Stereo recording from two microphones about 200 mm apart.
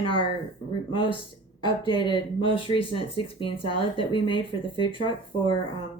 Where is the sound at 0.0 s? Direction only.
25° left (ahead or behind).